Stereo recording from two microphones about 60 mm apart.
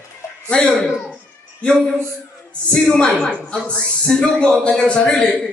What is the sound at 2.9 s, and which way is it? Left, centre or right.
A man's voice, centre.